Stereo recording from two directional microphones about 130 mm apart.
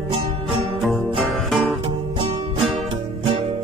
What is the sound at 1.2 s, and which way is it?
Music, centre (ahead or behind).